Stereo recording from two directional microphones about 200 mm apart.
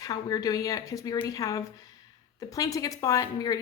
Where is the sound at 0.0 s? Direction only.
20° left (ahead or behind).